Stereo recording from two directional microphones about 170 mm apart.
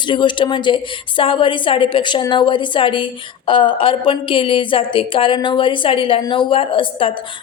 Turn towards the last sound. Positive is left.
turn(degrees=30)  # may be behind; listen again after turning